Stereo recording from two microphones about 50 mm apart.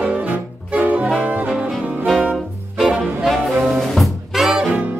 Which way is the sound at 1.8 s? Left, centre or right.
Right.